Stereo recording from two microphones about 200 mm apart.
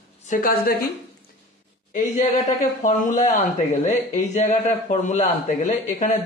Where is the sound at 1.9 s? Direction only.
35° left (ahead or behind).